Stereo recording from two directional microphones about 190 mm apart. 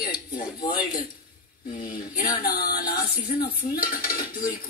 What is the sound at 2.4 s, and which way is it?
Speech, 50° left (ahead or behind).